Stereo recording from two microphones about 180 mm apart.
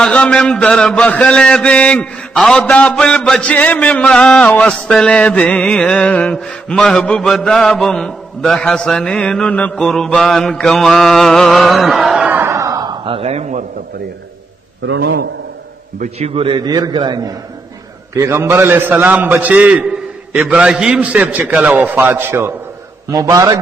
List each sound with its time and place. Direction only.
0.0 s mantra: 5° left (ahead or behind); by 13.7 s 40° right (ahead or behind)
14.9 s a man's voice: 65° right (ahead or behind)
16.0 s a man's voice: 35° right (ahead or behind)